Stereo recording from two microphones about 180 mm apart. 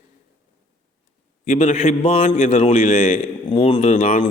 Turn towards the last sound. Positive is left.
turn(degrees=40)  # may be behind; listen again after turning